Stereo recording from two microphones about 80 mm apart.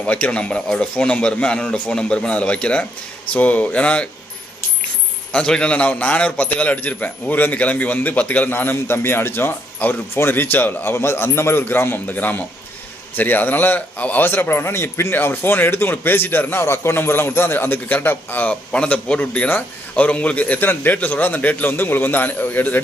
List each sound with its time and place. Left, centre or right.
0.0 s a man's voice: centre
5.3 s a man's voice: centre